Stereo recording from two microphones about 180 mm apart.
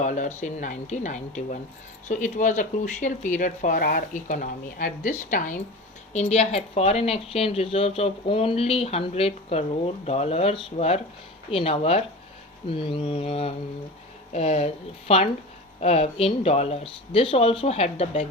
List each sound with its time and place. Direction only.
0.0 s speech: 45° left (ahead or behind)